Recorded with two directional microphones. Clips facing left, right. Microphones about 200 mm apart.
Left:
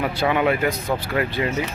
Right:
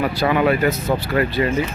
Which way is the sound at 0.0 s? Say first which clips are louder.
Right 2 dB; 15° left (ahead or behind).